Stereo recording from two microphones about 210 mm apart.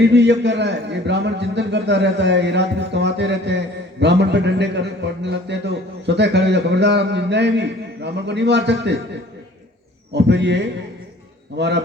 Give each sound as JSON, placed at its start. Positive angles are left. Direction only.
{"t": 0.0, "sound": "a man's voice", "side_deg": -55}
{"t": 10.1, "sound": "a man's voice", "side_deg": -55}